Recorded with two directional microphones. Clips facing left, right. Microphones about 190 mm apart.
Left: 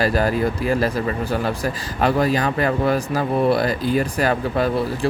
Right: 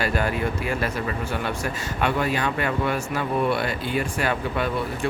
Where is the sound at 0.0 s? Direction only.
35° left (ahead or behind).